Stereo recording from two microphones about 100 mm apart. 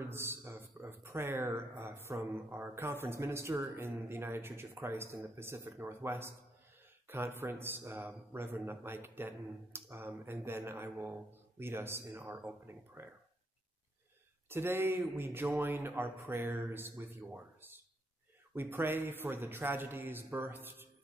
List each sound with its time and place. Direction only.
0.0 s speech: 25° right (ahead or behind)
14.5 s speech: 20° right (ahead or behind)